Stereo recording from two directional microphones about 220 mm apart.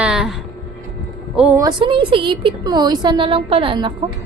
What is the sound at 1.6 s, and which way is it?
A woman's voice, 20° right (ahead or behind).